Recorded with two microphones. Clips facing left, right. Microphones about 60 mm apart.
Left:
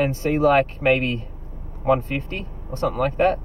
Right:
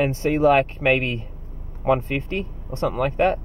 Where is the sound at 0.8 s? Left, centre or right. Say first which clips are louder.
Left 1 dB; centre.